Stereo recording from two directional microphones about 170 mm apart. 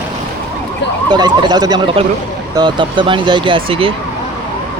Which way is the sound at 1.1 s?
25° right (ahead or behind).